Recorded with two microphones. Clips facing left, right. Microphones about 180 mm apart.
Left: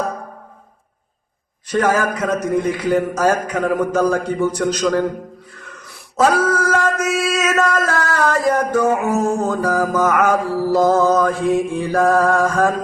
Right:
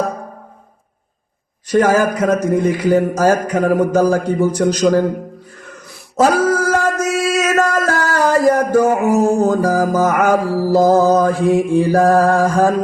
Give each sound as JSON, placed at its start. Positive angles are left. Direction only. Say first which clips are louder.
{"t": 1.7, "sound": "a man's voice", "louder": "right 4 dB", "side_deg": -30}
{"t": 6.4, "sound": "music", "louder": "right 2 dB", "side_deg": -30}
{"t": 9.9, "sound": "mantra", "louder": "right 2 dB", "side_deg": -30}